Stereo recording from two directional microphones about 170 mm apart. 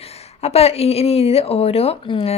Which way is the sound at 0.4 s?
35° left (ahead or behind).